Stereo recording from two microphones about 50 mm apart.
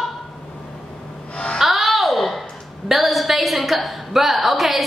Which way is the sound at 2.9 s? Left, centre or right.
Centre.